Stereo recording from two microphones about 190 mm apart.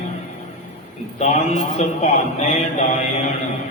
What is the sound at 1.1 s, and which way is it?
A man's voice, 35° left (ahead or behind).